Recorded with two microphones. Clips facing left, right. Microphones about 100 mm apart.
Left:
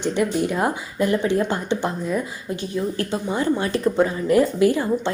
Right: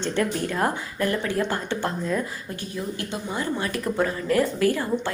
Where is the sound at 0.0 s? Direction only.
15° left (ahead or behind).